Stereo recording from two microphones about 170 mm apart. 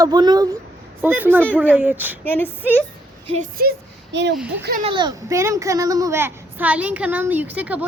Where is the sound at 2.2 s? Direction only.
10° left (ahead or behind).